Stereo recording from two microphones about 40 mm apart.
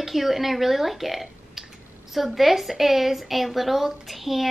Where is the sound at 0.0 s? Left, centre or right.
Centre.